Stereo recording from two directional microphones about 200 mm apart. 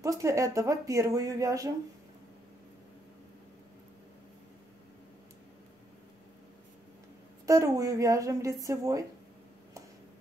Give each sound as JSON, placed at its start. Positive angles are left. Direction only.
{"t": 0.0, "sound": "speech", "side_deg": -15}
{"t": 7.4, "sound": "speech", "side_deg": -15}